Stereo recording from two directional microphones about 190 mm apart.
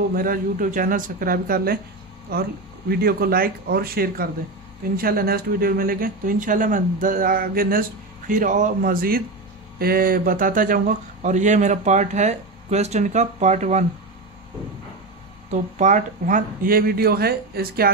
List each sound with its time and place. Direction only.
0.1 s speech: 45° right (ahead or behind)
15.8 s speech: 40° right (ahead or behind)